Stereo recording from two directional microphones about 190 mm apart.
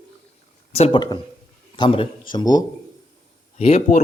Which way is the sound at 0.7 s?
30° left (ahead or behind).